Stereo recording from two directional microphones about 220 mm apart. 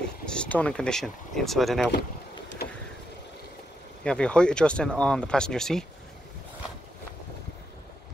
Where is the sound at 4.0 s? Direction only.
5° left (ahead or behind).